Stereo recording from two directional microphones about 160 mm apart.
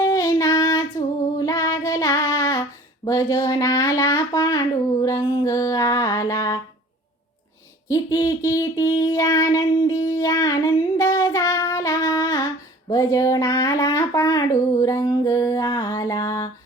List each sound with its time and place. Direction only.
0.0 s child singing: 20° left (ahead or behind)
7.9 s a sound: 20° left (ahead or behind)
12.9 s speech: 20° left (ahead or behind)